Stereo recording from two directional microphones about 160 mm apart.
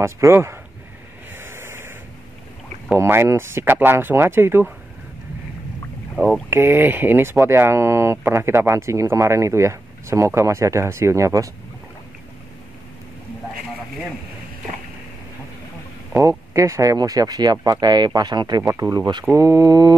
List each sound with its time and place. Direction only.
0.0 s speech: 15° right (ahead or behind)
1.3 s a sound: 15° right (ahead or behind)
2.9 s speech: 15° right (ahead or behind)
6.2 s speech: 15° right (ahead or behind)
16.2 s speech: 20° right (ahead or behind)